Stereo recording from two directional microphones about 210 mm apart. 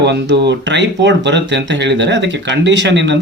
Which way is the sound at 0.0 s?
55° right (ahead or behind).